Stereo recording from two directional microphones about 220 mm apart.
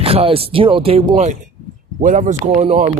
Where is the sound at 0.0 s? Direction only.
25° right (ahead or behind).